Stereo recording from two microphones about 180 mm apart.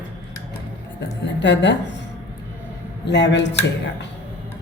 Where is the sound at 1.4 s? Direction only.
80° left.